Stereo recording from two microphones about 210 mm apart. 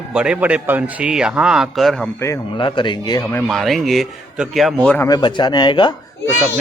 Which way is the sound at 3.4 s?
Centre (ahead or behind).